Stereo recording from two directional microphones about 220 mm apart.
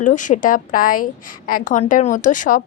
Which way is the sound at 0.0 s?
35° left (ahead or behind).